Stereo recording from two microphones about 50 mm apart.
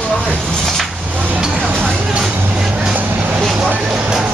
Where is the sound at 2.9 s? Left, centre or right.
Right.